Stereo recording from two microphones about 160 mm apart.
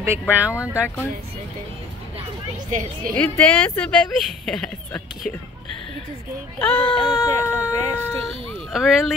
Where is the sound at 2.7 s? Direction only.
55° right (ahead or behind).